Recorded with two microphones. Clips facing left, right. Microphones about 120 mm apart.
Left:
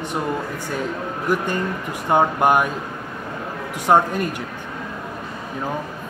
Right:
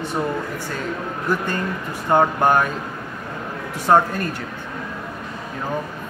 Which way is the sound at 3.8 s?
15° left (ahead or behind).